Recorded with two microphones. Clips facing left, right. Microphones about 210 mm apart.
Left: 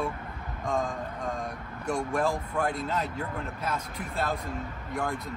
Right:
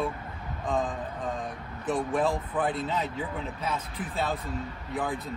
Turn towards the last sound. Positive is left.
turn(degrees=0)  # may be behind; listen again after turning